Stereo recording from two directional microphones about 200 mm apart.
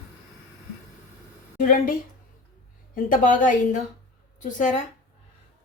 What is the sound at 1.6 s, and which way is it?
Speech, 45° left (ahead or behind).